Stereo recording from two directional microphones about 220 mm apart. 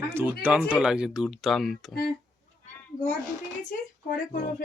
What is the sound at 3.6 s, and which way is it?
Speech, 35° left (ahead or behind).